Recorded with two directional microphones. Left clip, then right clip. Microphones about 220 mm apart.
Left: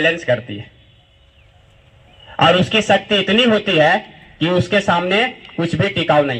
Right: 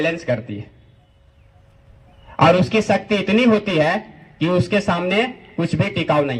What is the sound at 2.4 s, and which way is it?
A man's voice, 15° left (ahead or behind).